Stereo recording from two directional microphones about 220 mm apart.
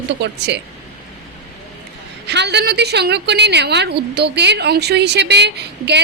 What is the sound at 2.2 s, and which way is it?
A woman's voice, 50° right (ahead or behind).